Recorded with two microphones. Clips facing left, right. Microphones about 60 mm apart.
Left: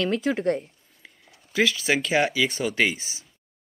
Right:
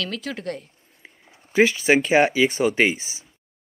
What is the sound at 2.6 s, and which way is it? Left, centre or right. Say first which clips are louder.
Speech: right 4 dB; right.